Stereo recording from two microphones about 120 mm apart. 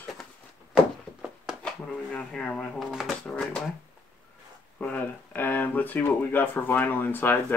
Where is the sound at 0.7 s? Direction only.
5° right (ahead or behind).